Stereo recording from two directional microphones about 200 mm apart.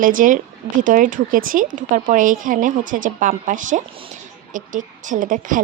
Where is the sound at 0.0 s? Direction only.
40° right (ahead or behind).